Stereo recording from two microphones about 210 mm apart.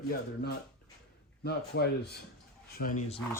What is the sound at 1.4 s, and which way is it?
Speech, 50° left (ahead or behind).